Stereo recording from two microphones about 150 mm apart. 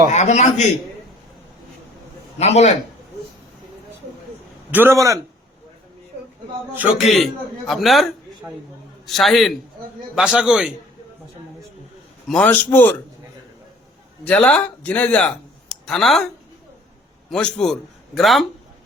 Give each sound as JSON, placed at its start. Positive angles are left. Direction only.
{"t": 0.1, "sound": "a man's voice", "side_deg": 50}
{"t": 2.4, "sound": "a man's voice", "side_deg": 45}
{"t": 4.7, "sound": "a man's voice", "side_deg": -15}
{"t": 7.0, "sound": "a man's voice", "side_deg": 0}
{"t": 12.3, "sound": "speech", "side_deg": 10}
{"t": 14.3, "sound": "speech", "side_deg": 10}
{"t": 17.3, "sound": "a man's voice", "side_deg": 5}